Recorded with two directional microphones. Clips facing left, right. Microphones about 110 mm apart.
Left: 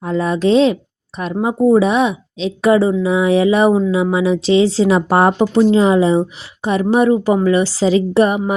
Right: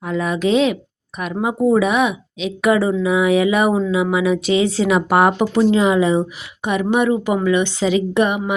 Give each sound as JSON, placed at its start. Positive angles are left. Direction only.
{"t": 0.0, "sound": "speech", "side_deg": 35}